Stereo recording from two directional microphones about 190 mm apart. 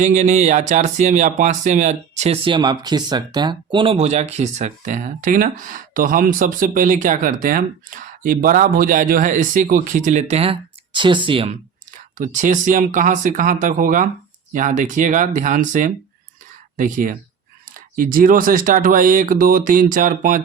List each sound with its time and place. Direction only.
0.0 s speech: 40° right (ahead or behind)
12.1 s speech: 45° right (ahead or behind)